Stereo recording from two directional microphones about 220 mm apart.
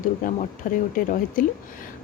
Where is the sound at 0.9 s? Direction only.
40° left (ahead or behind).